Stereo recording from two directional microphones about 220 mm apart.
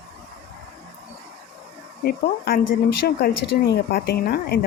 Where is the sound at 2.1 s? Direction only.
45° left (ahead or behind).